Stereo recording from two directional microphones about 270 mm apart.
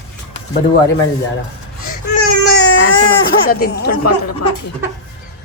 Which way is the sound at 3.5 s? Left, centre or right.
Left.